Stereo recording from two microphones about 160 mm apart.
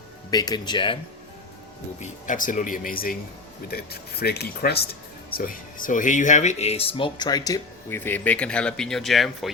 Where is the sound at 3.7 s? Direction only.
75° left (ahead or behind).